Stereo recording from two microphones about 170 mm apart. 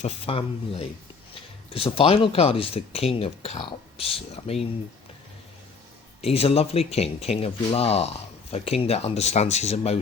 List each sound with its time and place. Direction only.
0.0 s speech: 35° left (ahead or behind)
6.2 s speech: 35° left (ahead or behind)